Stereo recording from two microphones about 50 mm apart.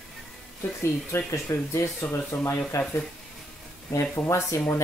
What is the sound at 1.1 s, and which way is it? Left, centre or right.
Speech, left.